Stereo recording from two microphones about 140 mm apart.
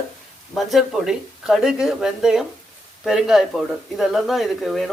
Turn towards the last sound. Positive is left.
turn(degrees=0)  # may be behind; listen again after turning